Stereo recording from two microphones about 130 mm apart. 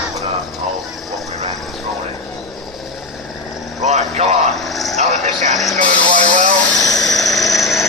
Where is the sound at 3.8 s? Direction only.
60° right (ahead or behind).